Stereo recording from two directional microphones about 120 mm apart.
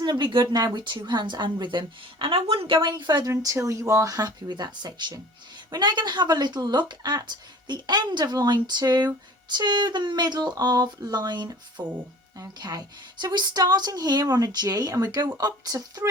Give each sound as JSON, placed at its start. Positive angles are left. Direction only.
{"t": 0.0, "sound": "speech", "side_deg": -35}